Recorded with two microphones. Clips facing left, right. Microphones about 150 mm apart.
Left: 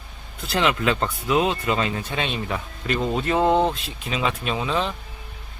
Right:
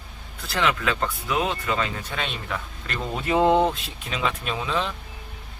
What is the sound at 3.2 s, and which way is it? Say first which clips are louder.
Speech: right 2 dB; 15° right (ahead or behind).